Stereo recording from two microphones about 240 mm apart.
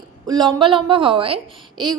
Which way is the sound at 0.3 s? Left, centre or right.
Centre.